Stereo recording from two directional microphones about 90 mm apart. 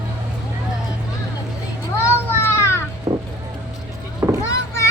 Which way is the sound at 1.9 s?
25° left (ahead or behind).